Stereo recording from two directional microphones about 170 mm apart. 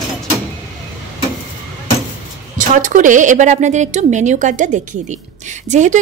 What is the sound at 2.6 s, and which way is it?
A woman's voice, 50° right (ahead or behind).